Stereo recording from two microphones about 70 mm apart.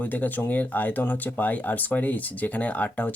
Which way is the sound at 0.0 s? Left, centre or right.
Left.